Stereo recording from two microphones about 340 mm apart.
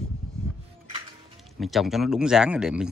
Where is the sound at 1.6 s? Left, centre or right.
Centre.